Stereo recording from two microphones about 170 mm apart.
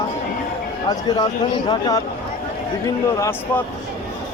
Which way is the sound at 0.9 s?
25° left (ahead or behind).